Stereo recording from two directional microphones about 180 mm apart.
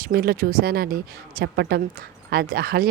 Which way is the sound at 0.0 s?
55° right (ahead or behind).